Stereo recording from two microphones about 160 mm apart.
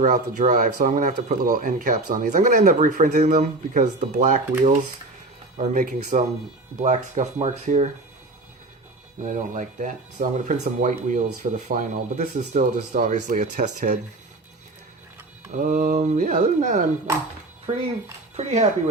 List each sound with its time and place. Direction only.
0.0 s speech: 50° right (ahead or behind)
9.2 s speech: 50° right (ahead or behind)
15.5 s speech: 55° right (ahead or behind)
17.7 s speech: 35° right (ahead or behind)